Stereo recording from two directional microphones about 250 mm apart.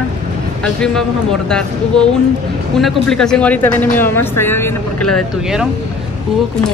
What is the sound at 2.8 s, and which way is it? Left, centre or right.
Speech, centre.